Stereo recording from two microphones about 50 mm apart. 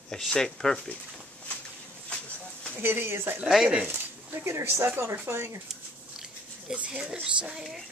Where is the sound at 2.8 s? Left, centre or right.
Right.